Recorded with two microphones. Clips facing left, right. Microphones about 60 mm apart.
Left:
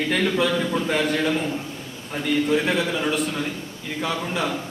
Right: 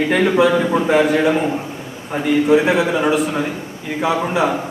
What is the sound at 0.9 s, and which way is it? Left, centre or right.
A man's voice, centre.